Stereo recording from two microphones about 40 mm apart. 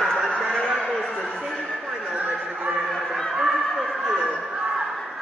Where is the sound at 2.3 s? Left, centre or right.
Right.